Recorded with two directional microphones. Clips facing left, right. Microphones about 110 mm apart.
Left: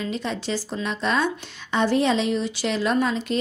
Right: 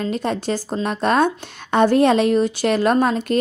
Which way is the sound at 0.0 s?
50° right (ahead or behind).